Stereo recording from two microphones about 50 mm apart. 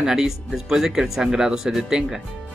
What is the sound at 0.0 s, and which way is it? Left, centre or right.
Speech, centre.